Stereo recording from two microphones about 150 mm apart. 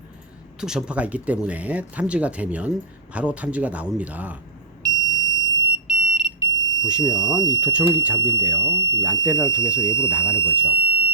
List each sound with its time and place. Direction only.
0.6 s speech: 5° right (ahead or behind)
4.8 s smoke detector: 25° right (ahead or behind)
5.7 s smoke detector: 10° right (ahead or behind)
7.1 s speech: 30° right (ahead or behind)
7.5 s speech: 10° right (ahead or behind)
10.5 s fire alarm: 10° right (ahead or behind)